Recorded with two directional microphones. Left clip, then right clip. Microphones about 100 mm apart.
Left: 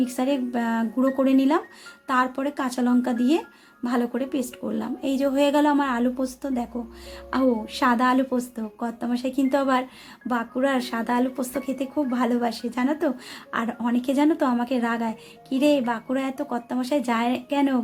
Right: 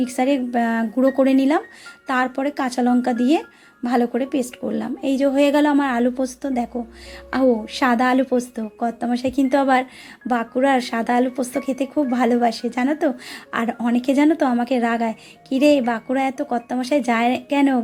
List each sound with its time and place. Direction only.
0.0 s speech: 25° right (ahead or behind)